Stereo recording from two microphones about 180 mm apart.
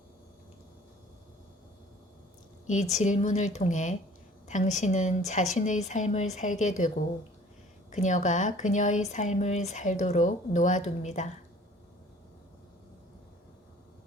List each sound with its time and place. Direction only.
2.9 s a woman's voice: 40° left (ahead or behind)